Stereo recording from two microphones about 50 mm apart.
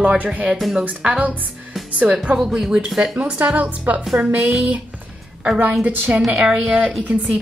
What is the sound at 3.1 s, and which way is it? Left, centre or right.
Speech, right.